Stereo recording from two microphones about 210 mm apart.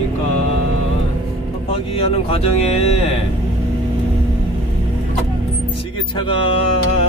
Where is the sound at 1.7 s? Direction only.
25° left (ahead or behind).